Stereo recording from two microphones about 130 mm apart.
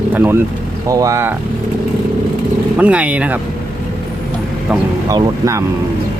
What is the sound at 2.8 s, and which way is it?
Speech, 10° right (ahead or behind).